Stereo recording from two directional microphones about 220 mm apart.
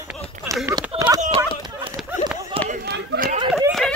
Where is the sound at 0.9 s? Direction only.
20° right (ahead or behind).